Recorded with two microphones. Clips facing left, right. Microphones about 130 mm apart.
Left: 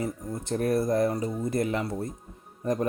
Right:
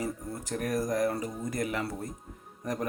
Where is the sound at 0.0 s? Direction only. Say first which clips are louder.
Left 3 dB; 30° left (ahead or behind).